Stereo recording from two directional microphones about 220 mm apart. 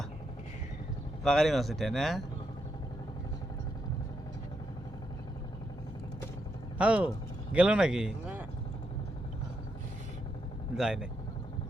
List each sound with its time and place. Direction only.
1.2 s speech: centre (ahead or behind)
6.7 s speech: 5° right (ahead or behind)
10.8 s speech: centre (ahead or behind)